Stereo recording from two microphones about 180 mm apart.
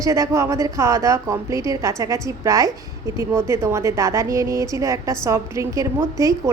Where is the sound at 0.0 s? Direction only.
20° right (ahead or behind).